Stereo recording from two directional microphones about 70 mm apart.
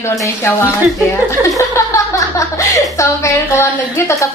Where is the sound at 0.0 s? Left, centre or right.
Left.